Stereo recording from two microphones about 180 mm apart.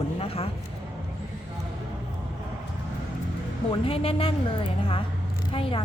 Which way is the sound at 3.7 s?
30° left (ahead or behind).